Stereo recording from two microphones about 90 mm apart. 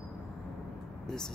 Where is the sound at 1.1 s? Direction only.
5° left (ahead or behind).